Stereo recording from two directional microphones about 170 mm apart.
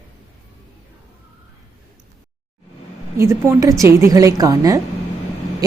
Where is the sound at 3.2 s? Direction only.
15° right (ahead or behind).